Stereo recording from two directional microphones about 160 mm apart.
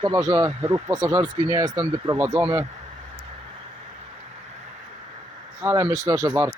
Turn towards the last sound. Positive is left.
turn(degrees=-15)  # may be behind; listen again after turning